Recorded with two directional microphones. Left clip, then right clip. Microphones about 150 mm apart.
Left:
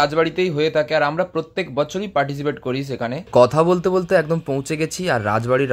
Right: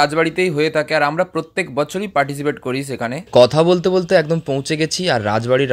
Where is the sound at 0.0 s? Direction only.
45° right (ahead or behind).